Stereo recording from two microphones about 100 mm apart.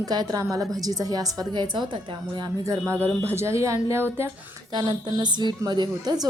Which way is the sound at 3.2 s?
30° right (ahead or behind).